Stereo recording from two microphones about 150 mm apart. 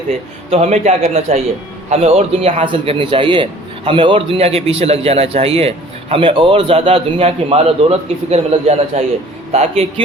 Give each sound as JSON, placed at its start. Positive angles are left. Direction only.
{"t": 0.5, "sound": "a man's voice", "side_deg": -45}